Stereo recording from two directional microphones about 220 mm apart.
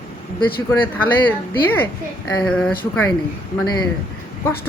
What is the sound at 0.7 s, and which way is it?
Speech, 10° left (ahead or behind).